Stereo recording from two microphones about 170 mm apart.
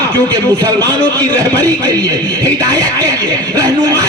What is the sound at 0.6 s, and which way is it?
Music, 20° right (ahead or behind).